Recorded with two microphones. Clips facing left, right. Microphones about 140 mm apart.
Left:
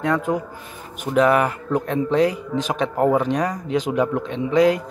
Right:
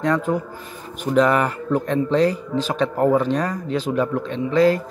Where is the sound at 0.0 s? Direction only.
10° left (ahead or behind).